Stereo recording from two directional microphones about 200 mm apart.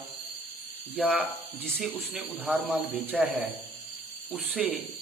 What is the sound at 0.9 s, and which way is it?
A man's voice, 5° right (ahead or behind).